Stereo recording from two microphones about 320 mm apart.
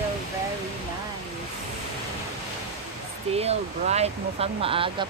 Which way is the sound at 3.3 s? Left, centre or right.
Centre.